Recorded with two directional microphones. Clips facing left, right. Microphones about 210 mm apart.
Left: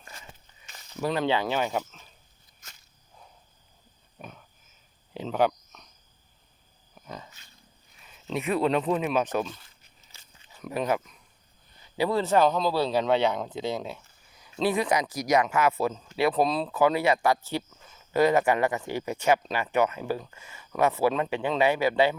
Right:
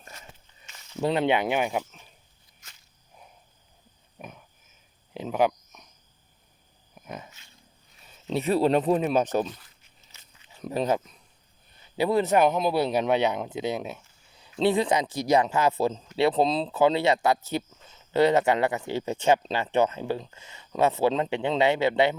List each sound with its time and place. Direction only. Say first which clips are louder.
0.7 s a sound: left 2 dB; 40° left (ahead or behind)
1.0 s speech: right 2 dB; 25° right (ahead or behind)
4.2 s pig: right 1 dB; 10° right (ahead or behind)
5.1 s cricket: right 1 dB; 10° right (ahead or behind)
6.9 s a sound: right 2 dB; 15° right (ahead or behind)
8.0 s speech: right 3 dB; 35° right (ahead or behind)
9.5 s a sound: right 2 dB; 25° left (ahead or behind)
9.8 s biting: even; 30° left (ahead or behind)
10.6 s speech: right 2 dB; 30° right (ahead or behind)
11.9 s speech: right 1 dB; 15° right (ahead or behind)